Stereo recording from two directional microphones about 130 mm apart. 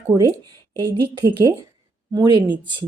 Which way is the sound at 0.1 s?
25° right (ahead or behind).